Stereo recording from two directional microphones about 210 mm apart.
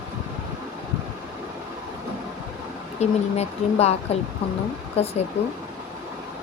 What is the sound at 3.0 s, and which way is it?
Speech, 30° left (ahead or behind).